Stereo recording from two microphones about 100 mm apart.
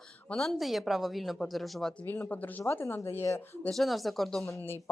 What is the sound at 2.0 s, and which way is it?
Speech, 20° left (ahead or behind).